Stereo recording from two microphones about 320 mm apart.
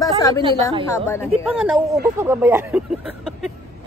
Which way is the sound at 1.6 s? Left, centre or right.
Centre.